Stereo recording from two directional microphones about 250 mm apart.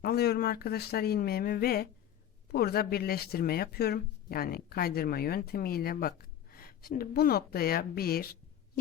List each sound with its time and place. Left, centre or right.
0.0 s speech: left